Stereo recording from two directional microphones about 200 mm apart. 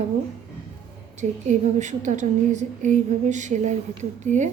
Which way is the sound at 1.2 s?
35° right (ahead or behind).